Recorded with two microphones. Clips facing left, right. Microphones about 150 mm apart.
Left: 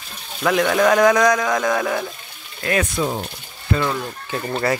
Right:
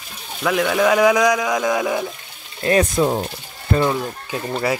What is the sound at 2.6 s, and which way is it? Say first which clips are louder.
Speech: right 4 dB; 30° right (ahead or behind).